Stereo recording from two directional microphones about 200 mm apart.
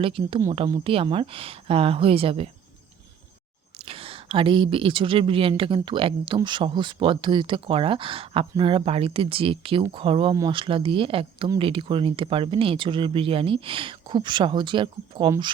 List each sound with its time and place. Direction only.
0.0 s speech: 25° right (ahead or behind)
3.8 s speech: 30° right (ahead or behind)